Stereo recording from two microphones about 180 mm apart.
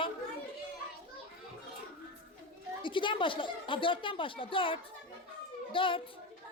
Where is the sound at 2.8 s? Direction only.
25° left (ahead or behind).